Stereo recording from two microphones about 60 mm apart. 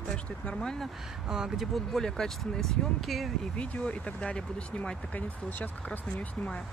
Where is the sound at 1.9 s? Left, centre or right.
Centre.